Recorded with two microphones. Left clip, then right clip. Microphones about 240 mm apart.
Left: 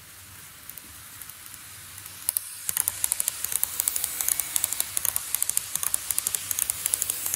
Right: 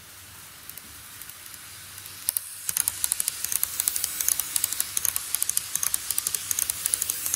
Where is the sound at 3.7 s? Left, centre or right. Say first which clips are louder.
Right 1 dB; left.